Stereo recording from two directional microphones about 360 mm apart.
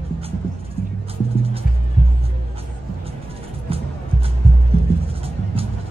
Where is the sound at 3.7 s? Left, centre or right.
Centre.